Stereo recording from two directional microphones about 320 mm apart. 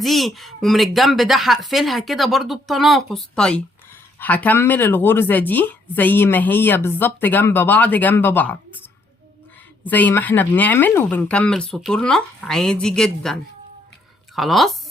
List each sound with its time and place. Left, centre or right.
0.0 s a woman's voice: centre
9.8 s a woman's voice: centre